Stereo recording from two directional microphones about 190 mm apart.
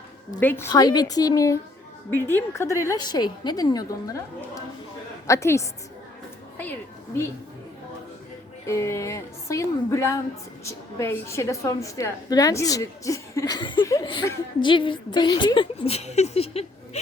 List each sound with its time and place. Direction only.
0.3 s a woman's voice: 10° left (ahead or behind)
5.2 s a woman's voice: 15° left (ahead or behind)
8.6 s a woman's voice: 15° left (ahead or behind); by 17.0 s 35° left (ahead or behind)